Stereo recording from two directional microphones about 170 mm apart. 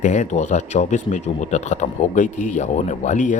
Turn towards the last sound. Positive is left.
turn(degrees=45)  # may be behind; listen again after turning